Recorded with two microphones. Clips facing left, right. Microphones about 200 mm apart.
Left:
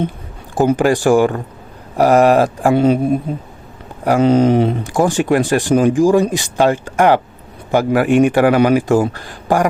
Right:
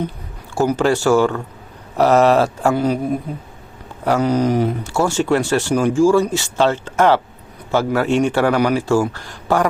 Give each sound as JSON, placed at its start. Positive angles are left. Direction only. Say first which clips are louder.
{"t": 0.5, "sound": "speech", "louder": "left 3 dB", "side_deg": 20}
{"t": 2.7, "sound": "speech", "louder": "left 5 dB", "side_deg": 25}